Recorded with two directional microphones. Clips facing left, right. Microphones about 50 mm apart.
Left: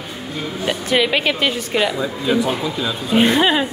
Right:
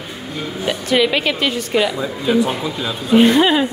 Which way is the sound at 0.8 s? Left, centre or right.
Centre.